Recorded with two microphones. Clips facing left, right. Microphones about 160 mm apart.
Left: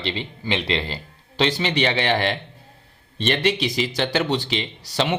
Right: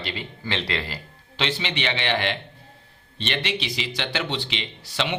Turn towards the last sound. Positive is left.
turn(degrees=40)  # may be behind; listen again after turning